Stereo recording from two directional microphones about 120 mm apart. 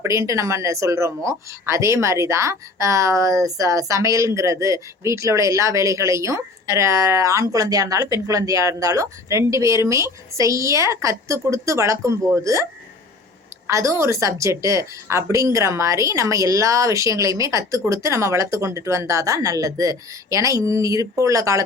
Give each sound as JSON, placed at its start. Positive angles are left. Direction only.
{"t": 0.0, "sound": "speech", "side_deg": -25}
{"t": 13.7, "sound": "speech", "side_deg": -25}